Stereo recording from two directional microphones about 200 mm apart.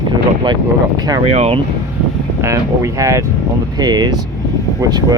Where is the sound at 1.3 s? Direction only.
30° right (ahead or behind).